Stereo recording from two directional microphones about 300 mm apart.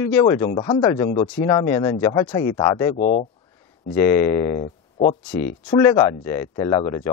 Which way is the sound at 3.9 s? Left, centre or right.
Centre.